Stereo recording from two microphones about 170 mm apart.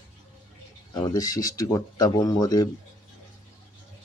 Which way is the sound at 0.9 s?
20° left (ahead or behind).